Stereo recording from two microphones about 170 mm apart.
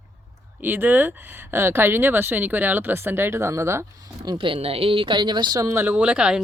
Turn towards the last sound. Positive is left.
turn(degrees=-5)  # may be behind; listen again after turning